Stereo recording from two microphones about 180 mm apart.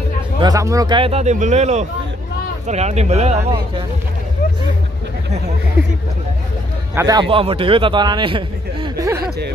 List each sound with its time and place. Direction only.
0.4 s speech: 20° right (ahead or behind); by 3.8 s 35° right (ahead or behind)
7.0 s a man's voice: 20° right (ahead or behind)